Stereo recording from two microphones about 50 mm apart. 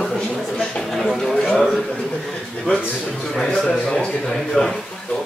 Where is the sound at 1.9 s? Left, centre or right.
Centre.